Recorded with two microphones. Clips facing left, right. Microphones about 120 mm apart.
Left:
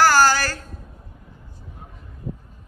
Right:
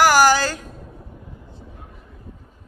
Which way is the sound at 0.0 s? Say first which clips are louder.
Right 2 dB; 15° right (ahead or behind).